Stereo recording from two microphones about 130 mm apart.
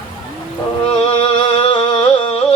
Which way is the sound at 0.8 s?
50° left (ahead or behind).